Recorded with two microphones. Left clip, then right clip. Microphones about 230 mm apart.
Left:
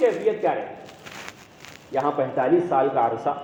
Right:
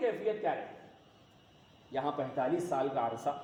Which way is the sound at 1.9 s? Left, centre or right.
Right.